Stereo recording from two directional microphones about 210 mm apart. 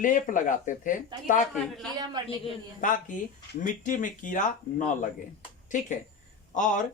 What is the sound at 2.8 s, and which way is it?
Speech, 40° left (ahead or behind).